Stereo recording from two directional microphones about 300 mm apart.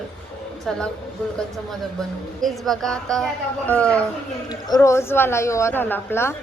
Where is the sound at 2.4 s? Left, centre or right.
Centre.